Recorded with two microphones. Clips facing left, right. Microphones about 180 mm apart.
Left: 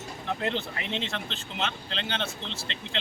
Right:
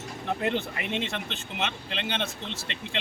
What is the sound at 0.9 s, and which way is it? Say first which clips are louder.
Speech: right 2 dB; 10° right (ahead or behind).